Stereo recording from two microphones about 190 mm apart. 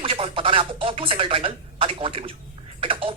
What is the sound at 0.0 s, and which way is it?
Speech, 30° right (ahead or behind).